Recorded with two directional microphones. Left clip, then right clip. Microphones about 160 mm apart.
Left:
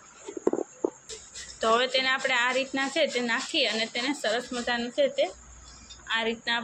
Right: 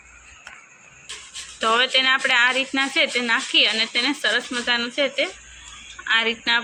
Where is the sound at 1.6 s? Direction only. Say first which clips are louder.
Right 5 dB; 5° right (ahead or behind).